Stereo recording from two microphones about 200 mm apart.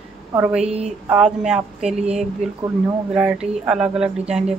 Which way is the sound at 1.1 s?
5° right (ahead or behind).